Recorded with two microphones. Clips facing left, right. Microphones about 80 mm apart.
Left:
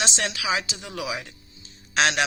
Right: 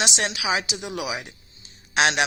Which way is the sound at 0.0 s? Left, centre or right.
Right.